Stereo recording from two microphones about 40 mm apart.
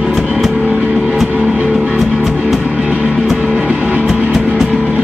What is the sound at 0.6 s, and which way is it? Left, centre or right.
Music, right.